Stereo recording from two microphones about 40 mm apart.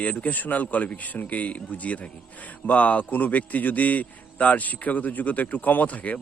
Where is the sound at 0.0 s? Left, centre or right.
Left.